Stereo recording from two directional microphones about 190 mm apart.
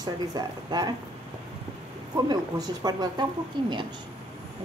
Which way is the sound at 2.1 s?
20° right (ahead or behind).